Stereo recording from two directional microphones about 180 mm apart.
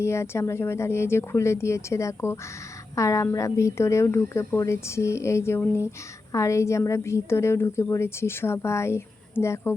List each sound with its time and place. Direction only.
0.0 s a woman's voice: 15° left (ahead or behind)